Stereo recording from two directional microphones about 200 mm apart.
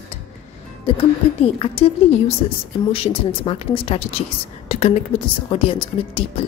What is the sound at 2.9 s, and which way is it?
A woman's voice, 30° left (ahead or behind).